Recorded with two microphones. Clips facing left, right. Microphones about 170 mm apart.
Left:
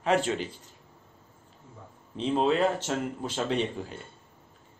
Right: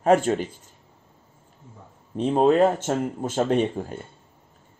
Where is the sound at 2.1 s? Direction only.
50° right (ahead or behind).